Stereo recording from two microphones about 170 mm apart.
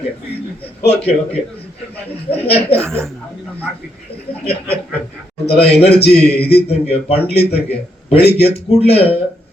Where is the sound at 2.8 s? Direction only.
15° right (ahead or behind).